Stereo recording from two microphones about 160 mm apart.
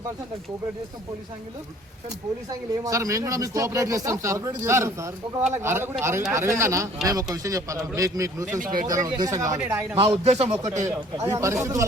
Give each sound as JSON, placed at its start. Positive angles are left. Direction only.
{"t": 2.5, "sound": "speech", "side_deg": -20}
{"t": 8.5, "sound": "speech", "side_deg": -55}
{"t": 8.9, "sound": "speech", "side_deg": -20}
{"t": 10.2, "sound": "a man's voice", "side_deg": -40}
{"t": 10.8, "sound": "speech", "side_deg": -20}